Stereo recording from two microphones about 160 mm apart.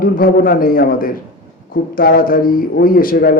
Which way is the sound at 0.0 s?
65° left (ahead or behind).